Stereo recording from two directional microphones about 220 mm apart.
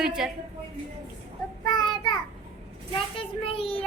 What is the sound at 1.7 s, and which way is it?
Child singing, 20° left (ahead or behind).